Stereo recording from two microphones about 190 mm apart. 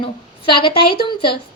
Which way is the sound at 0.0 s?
25° left (ahead or behind).